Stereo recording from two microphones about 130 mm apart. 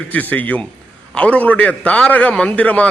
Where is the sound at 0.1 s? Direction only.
15° left (ahead or behind).